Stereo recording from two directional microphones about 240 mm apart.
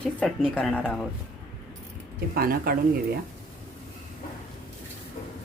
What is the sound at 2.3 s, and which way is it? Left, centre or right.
Speech, right.